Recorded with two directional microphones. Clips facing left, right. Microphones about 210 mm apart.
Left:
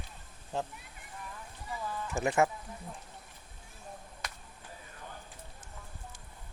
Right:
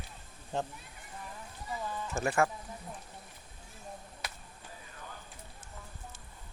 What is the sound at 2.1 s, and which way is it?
Speech, 20° left (ahead or behind).